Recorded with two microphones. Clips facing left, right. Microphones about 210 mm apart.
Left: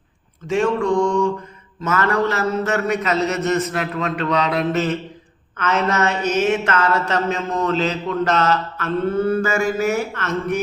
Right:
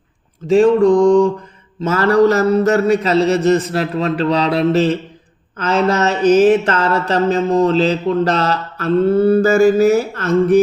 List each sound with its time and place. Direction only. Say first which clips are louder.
0.4 s mantra: right 8 dB; 35° right (ahead or behind)